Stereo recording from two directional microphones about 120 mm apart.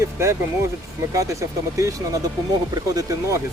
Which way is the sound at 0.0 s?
25° right (ahead or behind).